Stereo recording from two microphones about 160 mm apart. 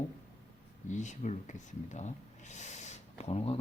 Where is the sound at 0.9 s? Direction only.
50° left (ahead or behind).